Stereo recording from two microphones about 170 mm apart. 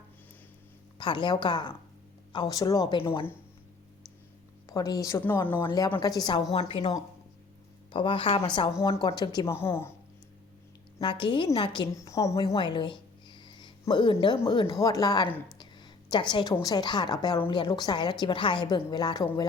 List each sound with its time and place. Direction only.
0.9 s a woman's voice: 25° left (ahead or behind)
4.7 s a woman's voice: 20° left (ahead or behind)
6.5 s a woman's voice: 35° left (ahead or behind); by 9.9 s 15° left (ahead or behind)
11.0 s a woman's voice: 30° left (ahead or behind)
11.9 s a woman's voice: 20° left (ahead or behind)
12.5 s a woman's voice: 30° left (ahead or behind)